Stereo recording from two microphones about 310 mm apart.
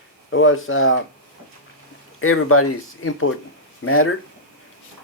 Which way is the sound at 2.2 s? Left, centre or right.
Left.